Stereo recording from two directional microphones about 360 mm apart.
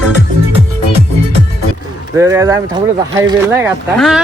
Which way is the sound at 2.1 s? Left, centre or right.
Centre.